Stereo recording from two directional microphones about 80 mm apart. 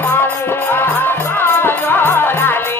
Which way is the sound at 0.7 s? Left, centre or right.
Left.